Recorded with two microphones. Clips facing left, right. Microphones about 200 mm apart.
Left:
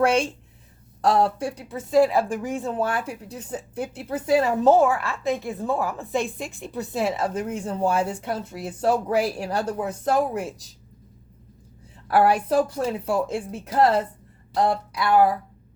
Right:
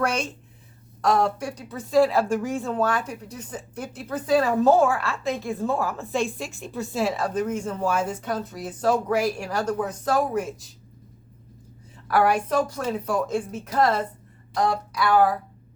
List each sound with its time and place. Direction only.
0.0 s a woman's voice: 30° left (ahead or behind)
4.3 s a woman's voice: 20° left (ahead or behind)
12.0 s a woman's voice: 30° left (ahead or behind)